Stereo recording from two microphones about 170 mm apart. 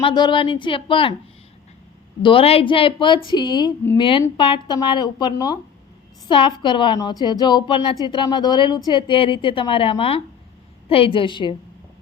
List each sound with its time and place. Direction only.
0.0 s speech: 25° left (ahead or behind)
2.2 s a woman's voice: 35° left (ahead or behind)